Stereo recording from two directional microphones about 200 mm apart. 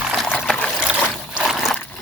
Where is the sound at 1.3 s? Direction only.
Centre (ahead or behind).